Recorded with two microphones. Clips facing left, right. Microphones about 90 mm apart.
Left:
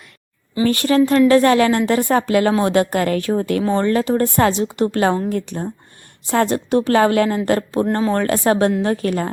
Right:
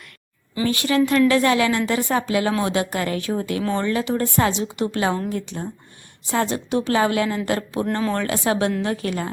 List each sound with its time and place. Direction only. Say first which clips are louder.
0.6 s a woman's voice: left 4 dB; 45° left (ahead or behind)